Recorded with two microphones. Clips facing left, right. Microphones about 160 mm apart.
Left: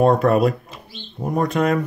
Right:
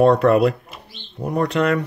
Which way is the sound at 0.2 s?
65° right (ahead or behind).